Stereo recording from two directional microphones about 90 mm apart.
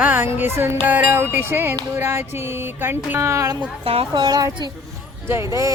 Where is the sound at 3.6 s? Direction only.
75° right (ahead or behind).